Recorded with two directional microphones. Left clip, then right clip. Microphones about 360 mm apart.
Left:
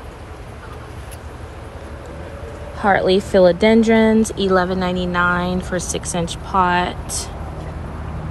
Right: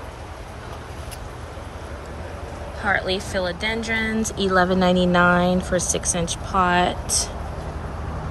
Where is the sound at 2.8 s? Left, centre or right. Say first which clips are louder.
Left 7 dB; centre.